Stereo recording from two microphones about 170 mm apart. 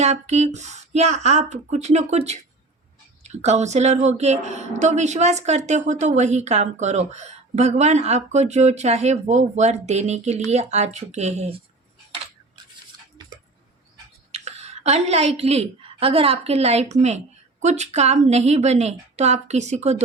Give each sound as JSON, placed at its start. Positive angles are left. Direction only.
{"t": 0.0, "sound": "speech", "side_deg": -40}
{"t": 14.3, "sound": "a woman's voice", "side_deg": -40}